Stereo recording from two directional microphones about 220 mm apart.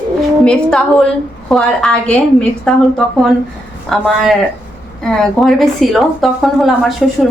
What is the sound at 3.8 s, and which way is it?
A woman's voice, centre (ahead or behind).